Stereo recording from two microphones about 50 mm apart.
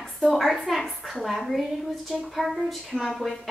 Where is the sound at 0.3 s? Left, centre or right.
Centre.